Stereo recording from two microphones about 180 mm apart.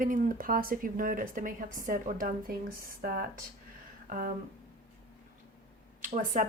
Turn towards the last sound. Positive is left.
turn(degrees=-45)  # may be behind; listen again after turning